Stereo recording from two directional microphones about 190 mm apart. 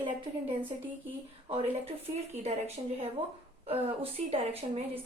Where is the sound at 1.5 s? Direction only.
30° right (ahead or behind).